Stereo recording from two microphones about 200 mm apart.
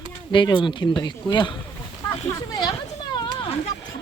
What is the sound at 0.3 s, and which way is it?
Speech, 25° left (ahead or behind).